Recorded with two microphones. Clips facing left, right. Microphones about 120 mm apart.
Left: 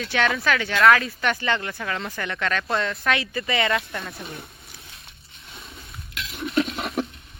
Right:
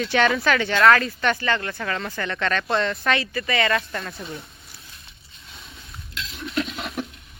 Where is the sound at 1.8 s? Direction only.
5° left (ahead or behind).